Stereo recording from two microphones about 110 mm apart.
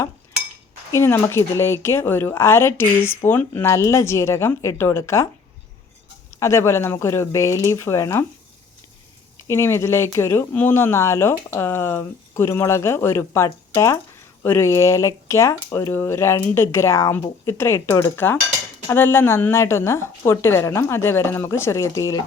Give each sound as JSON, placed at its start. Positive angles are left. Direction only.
{"t": 0.9, "sound": "speech", "side_deg": 20}
{"t": 6.4, "sound": "speech", "side_deg": 25}
{"t": 9.5, "sound": "speech", "side_deg": 25}